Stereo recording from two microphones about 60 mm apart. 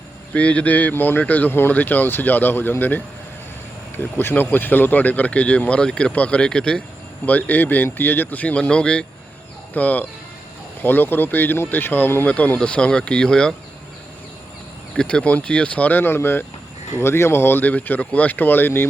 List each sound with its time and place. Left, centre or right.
0.3 s speech: left
7.3 s speech: left
9.7 s speech: left
12.2 s speech: left
14.9 s speech: centre
16.0 s speech: left